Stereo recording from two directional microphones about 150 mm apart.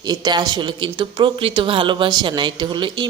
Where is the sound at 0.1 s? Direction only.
25° right (ahead or behind).